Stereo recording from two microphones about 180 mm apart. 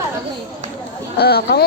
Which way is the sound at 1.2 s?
60° left (ahead or behind).